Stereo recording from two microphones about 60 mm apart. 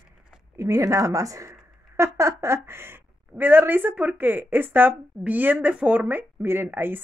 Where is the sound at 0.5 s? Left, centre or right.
Right.